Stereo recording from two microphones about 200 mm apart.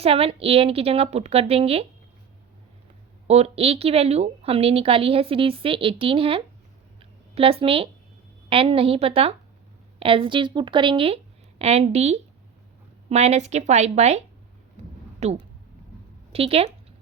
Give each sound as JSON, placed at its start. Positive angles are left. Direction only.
{"t": 0.0, "sound": "a woman's voice", "side_deg": -30}
{"t": 3.2, "sound": "a woman's voice", "side_deg": -30}
{"t": 7.0, "sound": "a sound", "side_deg": -30}
{"t": 8.4, "sound": "a woman's voice", "side_deg": -25}